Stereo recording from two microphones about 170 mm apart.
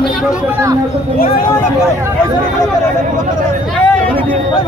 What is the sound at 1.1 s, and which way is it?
Speech, 60° left (ahead or behind).